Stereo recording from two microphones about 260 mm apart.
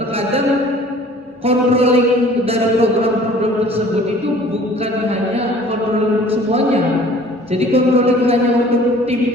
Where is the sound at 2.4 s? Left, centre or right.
Right.